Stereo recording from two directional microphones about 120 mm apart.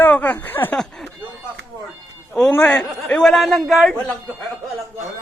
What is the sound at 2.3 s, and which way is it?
A man's voice, 10° left (ahead or behind).